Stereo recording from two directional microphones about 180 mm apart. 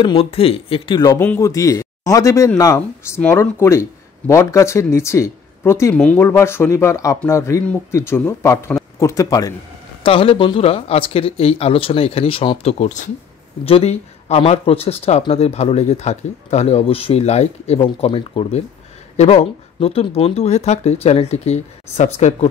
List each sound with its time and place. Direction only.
0.0 s speech: 30° left (ahead or behind)
10.0 s speech: 30° left (ahead or behind)